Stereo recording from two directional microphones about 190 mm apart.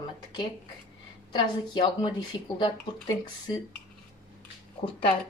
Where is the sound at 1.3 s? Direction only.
25° left (ahead or behind).